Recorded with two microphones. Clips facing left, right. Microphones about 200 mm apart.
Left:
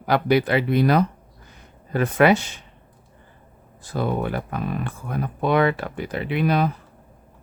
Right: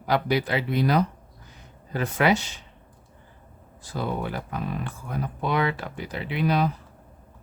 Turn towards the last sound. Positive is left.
turn(degrees=55)  # may be behind; listen again after turning